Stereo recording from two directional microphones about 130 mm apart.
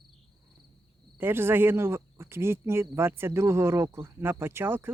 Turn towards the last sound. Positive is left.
turn(degrees=-15)  # may be behind; listen again after turning